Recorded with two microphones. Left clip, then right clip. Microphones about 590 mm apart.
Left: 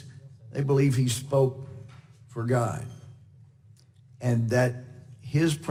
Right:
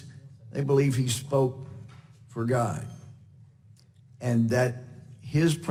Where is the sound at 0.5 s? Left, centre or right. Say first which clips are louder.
Right 1 dB; centre.